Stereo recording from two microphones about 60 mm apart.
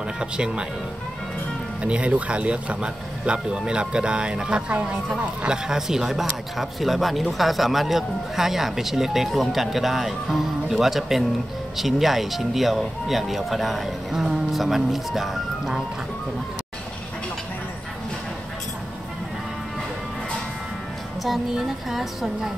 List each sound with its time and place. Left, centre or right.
0.2 s speech: centre
1.8 s a man's voice: right; by 15.8 s centre
21.2 s a man's voice: centre